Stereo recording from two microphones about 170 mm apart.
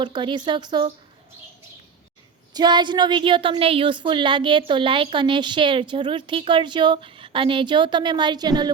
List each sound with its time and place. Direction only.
0.0 s a woman's voice: 25° right (ahead or behind)
2.5 s a woman's voice: 25° right (ahead or behind)